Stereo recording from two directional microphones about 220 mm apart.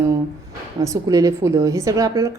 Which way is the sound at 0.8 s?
15° right (ahead or behind).